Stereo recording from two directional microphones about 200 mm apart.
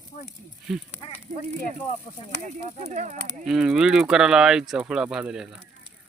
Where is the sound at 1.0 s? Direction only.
25° left (ahead or behind).